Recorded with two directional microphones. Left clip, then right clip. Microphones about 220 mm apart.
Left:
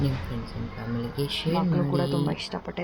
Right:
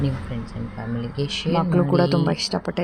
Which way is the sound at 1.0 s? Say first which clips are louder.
Right 3 dB; 20° right (ahead or behind).